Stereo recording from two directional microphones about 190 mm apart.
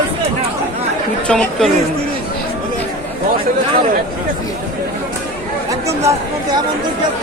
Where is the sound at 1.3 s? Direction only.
5° left (ahead or behind).